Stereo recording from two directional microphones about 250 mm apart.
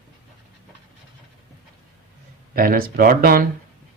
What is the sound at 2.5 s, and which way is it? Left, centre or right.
Speech, right.